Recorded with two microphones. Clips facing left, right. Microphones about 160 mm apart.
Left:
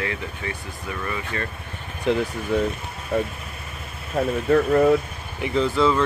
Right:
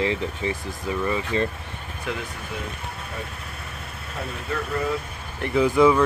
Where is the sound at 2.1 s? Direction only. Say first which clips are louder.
Left 9 dB; 30° left (ahead or behind).